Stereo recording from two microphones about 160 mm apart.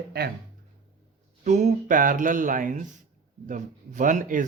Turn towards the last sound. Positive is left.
turn(degrees=-55)  # may be behind; listen again after turning